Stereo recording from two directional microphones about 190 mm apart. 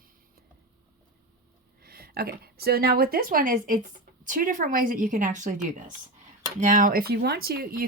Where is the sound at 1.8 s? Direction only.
50° right (ahead or behind).